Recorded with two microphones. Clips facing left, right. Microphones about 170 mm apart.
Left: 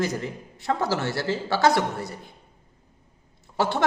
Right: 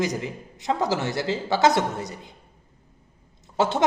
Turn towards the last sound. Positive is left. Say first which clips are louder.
# right 2 dB
turn(degrees=-20)  # may be behind; listen again after turning